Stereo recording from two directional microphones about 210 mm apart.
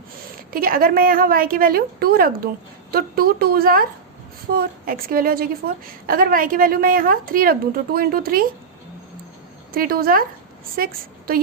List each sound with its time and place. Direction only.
0.5 s a woman's voice: 45° right (ahead or behind)
9.7 s a woman's voice: 45° right (ahead or behind)